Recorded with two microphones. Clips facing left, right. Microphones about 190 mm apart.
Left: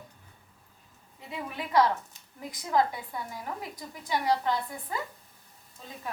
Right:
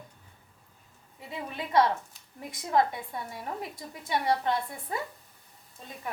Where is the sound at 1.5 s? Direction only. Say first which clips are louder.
Even; 25° right (ahead or behind).